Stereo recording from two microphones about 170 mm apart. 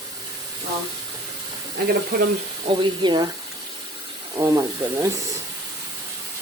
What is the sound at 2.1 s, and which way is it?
Speech, 55° right (ahead or behind).